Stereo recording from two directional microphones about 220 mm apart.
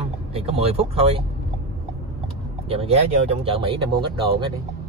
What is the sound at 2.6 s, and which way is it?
Speech, 25° right (ahead or behind).